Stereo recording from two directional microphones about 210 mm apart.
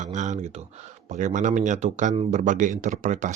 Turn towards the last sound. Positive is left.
turn(degrees=-35)  # may be behind; listen again after turning